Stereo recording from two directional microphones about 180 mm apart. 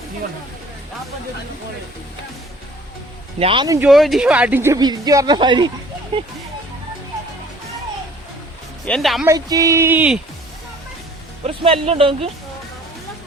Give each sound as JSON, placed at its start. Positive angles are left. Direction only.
{"t": 3.3, "sound": "speech", "side_deg": -30}
{"t": 3.8, "sound": "speech", "side_deg": 0}
{"t": 8.8, "sound": "speech", "side_deg": 5}
{"t": 9.2, "sound": "speech", "side_deg": -20}
{"t": 11.4, "sound": "speech", "side_deg": -35}